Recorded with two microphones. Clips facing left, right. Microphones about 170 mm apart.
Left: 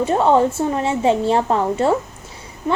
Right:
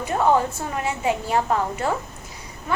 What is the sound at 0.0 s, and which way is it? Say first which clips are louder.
A woman's voice: left 5 dB; 25° left (ahead or behind).